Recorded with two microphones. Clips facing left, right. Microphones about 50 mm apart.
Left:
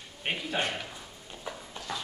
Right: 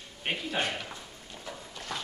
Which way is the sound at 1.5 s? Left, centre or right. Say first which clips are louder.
Left 3 dB; centre.